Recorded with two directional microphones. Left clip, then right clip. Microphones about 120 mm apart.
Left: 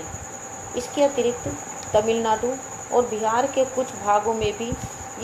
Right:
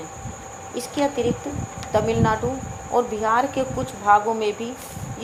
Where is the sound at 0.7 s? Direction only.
60° right (ahead or behind).